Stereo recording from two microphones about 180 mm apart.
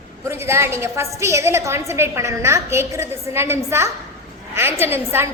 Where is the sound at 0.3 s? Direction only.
15° right (ahead or behind).